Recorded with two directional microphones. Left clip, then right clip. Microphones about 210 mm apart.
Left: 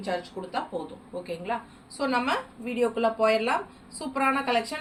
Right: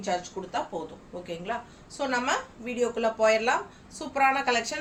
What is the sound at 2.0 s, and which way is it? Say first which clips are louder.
A woman's voice: left 1 dB; 20° right (ahead or behind).